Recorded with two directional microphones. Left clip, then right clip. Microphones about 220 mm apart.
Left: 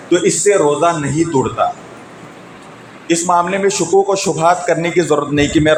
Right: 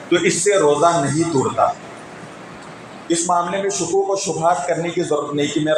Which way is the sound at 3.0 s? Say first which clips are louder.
Left 5 dB; 40° left (ahead or behind).